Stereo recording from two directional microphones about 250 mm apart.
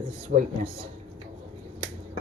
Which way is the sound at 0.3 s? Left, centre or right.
Right.